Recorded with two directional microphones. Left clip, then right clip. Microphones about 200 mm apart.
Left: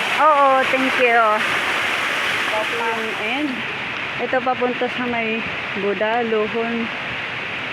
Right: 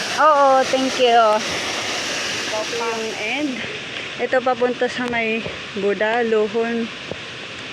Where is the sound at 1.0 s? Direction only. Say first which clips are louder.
Right 2 dB; 5° left (ahead or behind).